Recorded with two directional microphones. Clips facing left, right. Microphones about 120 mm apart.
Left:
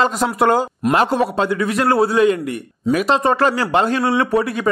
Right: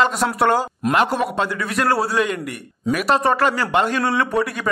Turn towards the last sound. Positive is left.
turn(degrees=25)  # may be behind; listen again after turning